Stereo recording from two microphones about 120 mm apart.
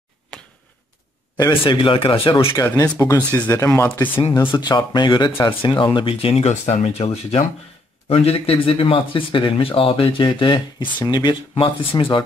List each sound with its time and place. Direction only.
1.5 s speech: 45° left (ahead or behind)
2.5 s speech: 30° left (ahead or behind)
4.5 s speech: 40° left (ahead or behind)
11.5 s speech: 50° left (ahead or behind)